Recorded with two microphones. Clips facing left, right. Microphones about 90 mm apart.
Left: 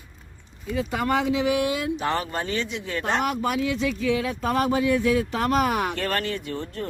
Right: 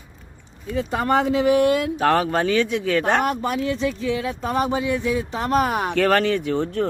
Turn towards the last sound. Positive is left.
turn(degrees=-90)